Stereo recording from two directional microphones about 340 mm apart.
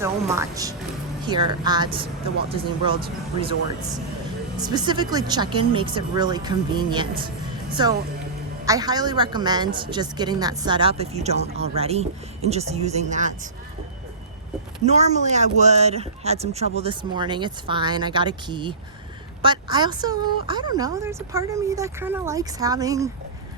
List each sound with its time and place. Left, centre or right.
0.0 s a woman's voice: centre
4.5 s a woman's voice: centre
14.8 s a woman's voice: centre